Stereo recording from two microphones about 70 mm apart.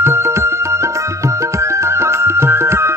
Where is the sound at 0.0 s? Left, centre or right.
Right.